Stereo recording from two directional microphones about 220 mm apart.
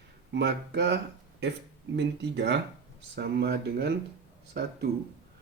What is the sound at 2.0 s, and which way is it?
Speech, 50° right (ahead or behind).